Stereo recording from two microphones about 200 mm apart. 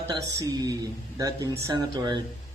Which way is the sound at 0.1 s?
20° right (ahead or behind).